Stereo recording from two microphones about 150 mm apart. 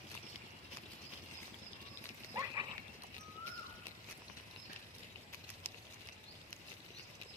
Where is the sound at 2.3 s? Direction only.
25° right (ahead or behind).